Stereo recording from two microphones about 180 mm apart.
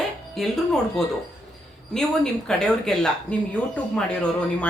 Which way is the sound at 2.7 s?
5° left (ahead or behind).